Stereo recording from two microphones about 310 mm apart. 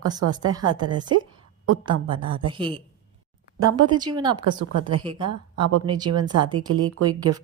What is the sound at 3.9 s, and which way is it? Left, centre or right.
Speech, centre.